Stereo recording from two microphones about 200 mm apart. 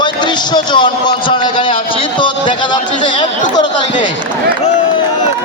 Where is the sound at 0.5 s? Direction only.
20° left (ahead or behind).